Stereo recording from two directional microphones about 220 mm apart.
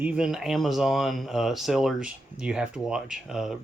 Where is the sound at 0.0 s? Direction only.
5° right (ahead or behind).